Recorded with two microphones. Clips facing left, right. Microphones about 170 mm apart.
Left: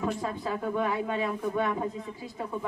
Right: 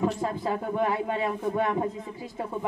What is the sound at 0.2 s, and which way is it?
Speech, 30° right (ahead or behind).